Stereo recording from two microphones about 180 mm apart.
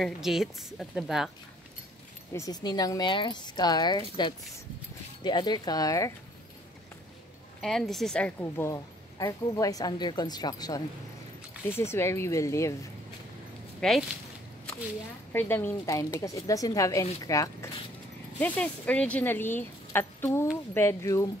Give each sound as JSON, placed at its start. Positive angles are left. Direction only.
{"t": 0.0, "sound": "a woman's voice", "side_deg": 0}
{"t": 2.3, "sound": "a woman's voice", "side_deg": 20}
{"t": 5.2, "sound": "a woman's voice", "side_deg": 25}
{"t": 7.6, "sound": "a woman's voice", "side_deg": 0}
{"t": 13.7, "sound": "speech", "side_deg": 0}
{"t": 15.3, "sound": "speech", "side_deg": 10}